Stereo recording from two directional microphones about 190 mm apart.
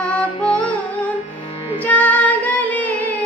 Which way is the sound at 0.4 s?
5° left (ahead or behind).